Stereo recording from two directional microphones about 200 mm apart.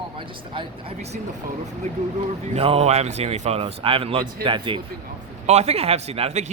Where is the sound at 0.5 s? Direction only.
30° right (ahead or behind).